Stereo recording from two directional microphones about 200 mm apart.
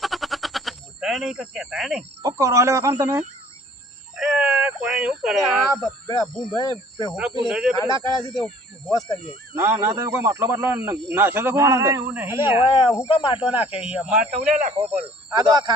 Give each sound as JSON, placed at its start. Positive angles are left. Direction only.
{"t": 0.0, "sound": "a sound", "side_deg": 0}
{"t": 2.2, "sound": "speech", "side_deg": -15}
{"t": 4.2, "sound": "a sound", "side_deg": -5}
{"t": 5.8, "sound": "speech", "side_deg": 20}
{"t": 7.1, "sound": "speech", "side_deg": -5}
{"t": 7.8, "sound": "speech", "side_deg": 15}
{"t": 9.6, "sound": "speech", "side_deg": -10}
{"t": 12.6, "sound": "speech", "side_deg": 25}
{"t": 13.9, "sound": "speech", "side_deg": -5}
{"t": 14.6, "sound": "speech", "side_deg": -35}
{"t": 15.4, "sound": "speech", "side_deg": -20}